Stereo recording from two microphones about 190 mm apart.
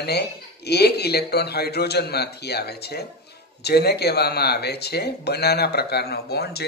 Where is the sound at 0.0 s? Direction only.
60° left (ahead or behind).